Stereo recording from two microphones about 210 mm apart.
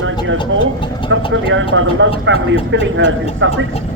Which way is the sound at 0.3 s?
25° left (ahead or behind).